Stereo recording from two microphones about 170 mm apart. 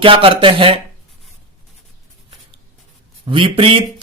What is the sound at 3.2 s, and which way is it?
Speech, 30° right (ahead or behind).